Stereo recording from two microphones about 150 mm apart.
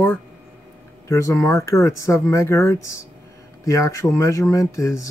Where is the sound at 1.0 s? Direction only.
20° left (ahead or behind).